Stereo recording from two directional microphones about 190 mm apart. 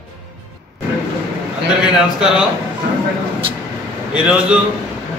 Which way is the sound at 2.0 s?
5° right (ahead or behind).